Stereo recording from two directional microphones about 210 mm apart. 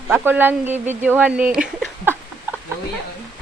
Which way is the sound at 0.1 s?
10° right (ahead or behind).